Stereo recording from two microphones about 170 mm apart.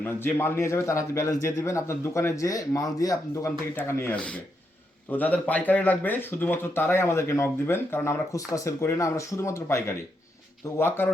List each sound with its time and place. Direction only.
0.0 s a man's voice: 10° left (ahead or behind)